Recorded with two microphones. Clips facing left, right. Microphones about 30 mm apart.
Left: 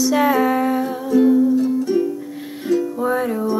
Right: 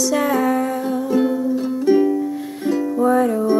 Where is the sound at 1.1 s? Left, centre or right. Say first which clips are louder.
Left 6 dB; centre.